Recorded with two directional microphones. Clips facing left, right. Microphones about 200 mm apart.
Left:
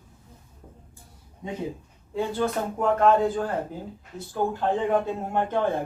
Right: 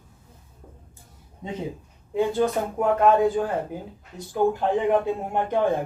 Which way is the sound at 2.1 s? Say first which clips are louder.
Right 4 dB; 15° right (ahead or behind).